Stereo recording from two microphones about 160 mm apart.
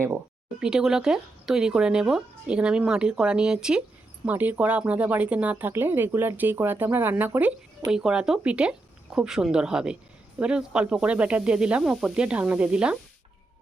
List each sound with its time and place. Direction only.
0.6 s speech: 5° right (ahead or behind)